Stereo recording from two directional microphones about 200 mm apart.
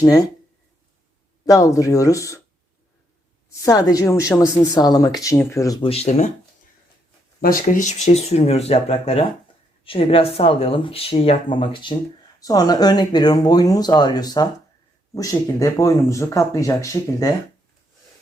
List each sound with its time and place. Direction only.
0.0 s a woman's voice: 15° left (ahead or behind)
1.5 s a woman's voice: 15° left (ahead or behind)
3.5 s a woman's voice: 15° left (ahead or behind); by 6.3 s 35° left (ahead or behind)
7.4 s a woman's voice: 45° left (ahead or behind); by 17.3 s 15° left (ahead or behind)